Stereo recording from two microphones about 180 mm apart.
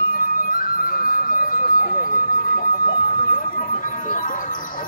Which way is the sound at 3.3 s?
45° left (ahead or behind).